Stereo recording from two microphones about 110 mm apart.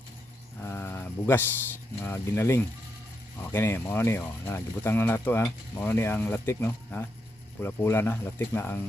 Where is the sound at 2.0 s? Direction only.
20° left (ahead or behind).